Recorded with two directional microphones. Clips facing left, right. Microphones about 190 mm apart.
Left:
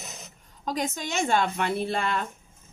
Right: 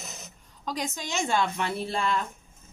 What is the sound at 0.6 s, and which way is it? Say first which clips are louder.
A woman's voice: left 3 dB; 50° left (ahead or behind).